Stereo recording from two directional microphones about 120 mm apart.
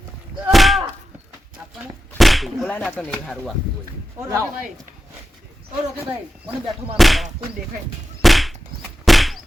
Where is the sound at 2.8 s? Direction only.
10° left (ahead or behind).